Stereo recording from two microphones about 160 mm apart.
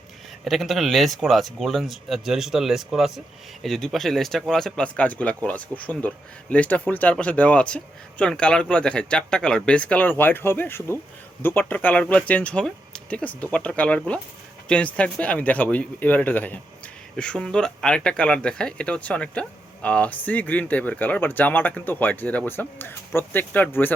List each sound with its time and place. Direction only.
0.4 s speech: centre (ahead or behind)